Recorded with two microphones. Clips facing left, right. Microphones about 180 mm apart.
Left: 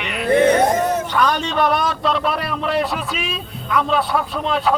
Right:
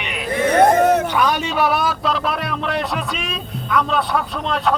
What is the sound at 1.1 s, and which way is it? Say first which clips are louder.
A man's voice: even; 10° right (ahead or behind).